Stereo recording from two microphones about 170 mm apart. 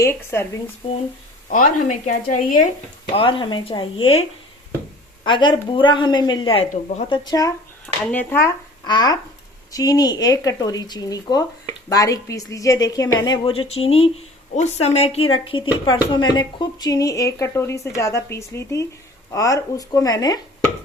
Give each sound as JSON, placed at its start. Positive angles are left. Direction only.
{"t": 0.0, "sound": "speech", "side_deg": 15}
{"t": 1.5, "sound": "a woman's voice", "side_deg": 50}
{"t": 3.1, "sound": "a woman's voice", "side_deg": 30}
{"t": 8.1, "sound": "speech", "side_deg": 10}
{"t": 8.9, "sound": "a woman's voice", "side_deg": 25}